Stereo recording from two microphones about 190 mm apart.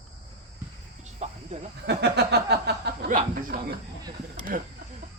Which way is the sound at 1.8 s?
60° right (ahead or behind).